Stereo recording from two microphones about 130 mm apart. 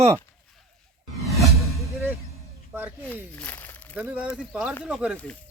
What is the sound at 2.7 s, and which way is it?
Snake, 10° right (ahead or behind).